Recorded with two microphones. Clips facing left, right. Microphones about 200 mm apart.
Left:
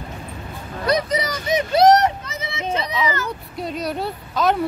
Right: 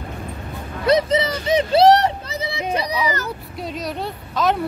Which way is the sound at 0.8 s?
25° right (ahead or behind).